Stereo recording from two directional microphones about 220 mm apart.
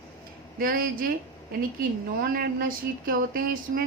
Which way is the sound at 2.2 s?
40° right (ahead or behind).